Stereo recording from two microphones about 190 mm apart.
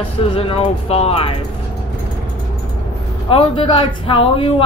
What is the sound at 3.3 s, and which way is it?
A woman's voice, 30° left (ahead or behind).